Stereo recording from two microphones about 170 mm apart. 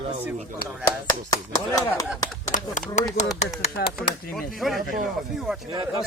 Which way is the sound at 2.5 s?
50° left (ahead or behind).